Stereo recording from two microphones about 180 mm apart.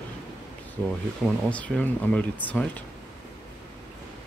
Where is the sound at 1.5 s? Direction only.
10° left (ahead or behind).